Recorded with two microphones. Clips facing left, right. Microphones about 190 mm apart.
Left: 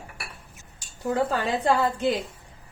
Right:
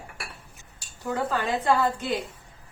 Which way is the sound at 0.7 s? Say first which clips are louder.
Left 4 dB; 35° left (ahead or behind).